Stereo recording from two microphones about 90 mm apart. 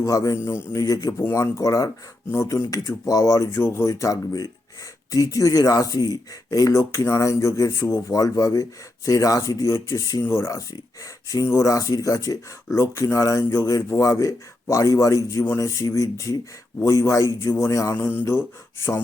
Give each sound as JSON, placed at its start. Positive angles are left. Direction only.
{"t": 0.0, "sound": "speech", "side_deg": 40}
{"t": 3.5, "sound": "speech", "side_deg": 25}
{"t": 7.9, "sound": "mantra", "side_deg": 30}
{"t": 8.1, "sound": "speech", "side_deg": 40}
{"t": 17.9, "sound": "mantra", "side_deg": 20}